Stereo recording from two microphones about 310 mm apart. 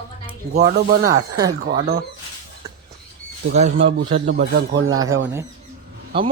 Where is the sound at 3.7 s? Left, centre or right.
Right.